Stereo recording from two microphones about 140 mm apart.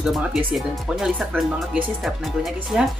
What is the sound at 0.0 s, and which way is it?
A woman's voice, centre (ahead or behind).